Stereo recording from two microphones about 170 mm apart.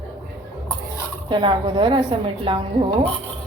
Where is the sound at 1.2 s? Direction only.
30° right (ahead or behind).